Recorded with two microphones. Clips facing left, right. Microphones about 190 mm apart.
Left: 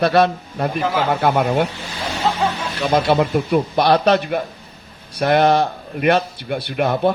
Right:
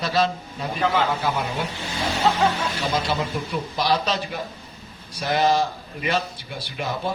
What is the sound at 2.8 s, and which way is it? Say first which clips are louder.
A man's voice: left 10 dB; 60° left (ahead or behind).